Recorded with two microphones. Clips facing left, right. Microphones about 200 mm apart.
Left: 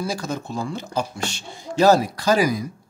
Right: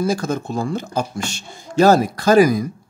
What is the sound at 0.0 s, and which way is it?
Speech, 50° right (ahead or behind).